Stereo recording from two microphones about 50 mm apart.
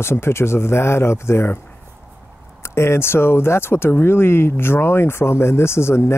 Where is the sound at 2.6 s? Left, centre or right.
Left.